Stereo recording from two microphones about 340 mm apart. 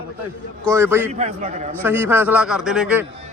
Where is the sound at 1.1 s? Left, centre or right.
Centre.